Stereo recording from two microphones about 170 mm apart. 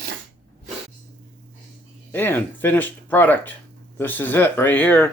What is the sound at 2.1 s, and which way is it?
Speech, 10° left (ahead or behind).